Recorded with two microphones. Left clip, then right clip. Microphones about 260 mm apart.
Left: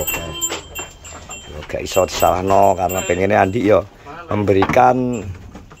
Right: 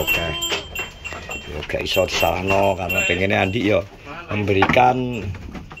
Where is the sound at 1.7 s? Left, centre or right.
Centre.